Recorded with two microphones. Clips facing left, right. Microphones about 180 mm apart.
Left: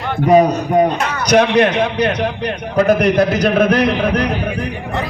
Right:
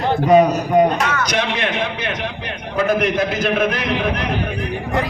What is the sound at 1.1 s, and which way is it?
A man's voice, 40° left (ahead or behind).